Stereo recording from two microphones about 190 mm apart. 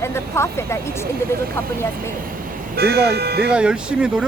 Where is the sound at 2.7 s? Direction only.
55° right (ahead or behind).